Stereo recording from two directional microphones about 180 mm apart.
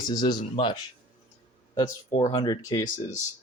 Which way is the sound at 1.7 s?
20° left (ahead or behind).